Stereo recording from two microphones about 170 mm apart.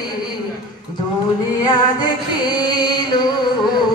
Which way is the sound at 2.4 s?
25° left (ahead or behind).